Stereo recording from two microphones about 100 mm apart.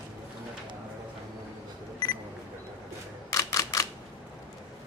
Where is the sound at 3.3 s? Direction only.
35° left (ahead or behind).